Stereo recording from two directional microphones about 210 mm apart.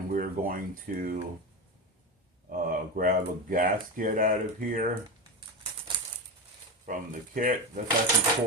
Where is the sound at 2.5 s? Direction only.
40° right (ahead or behind).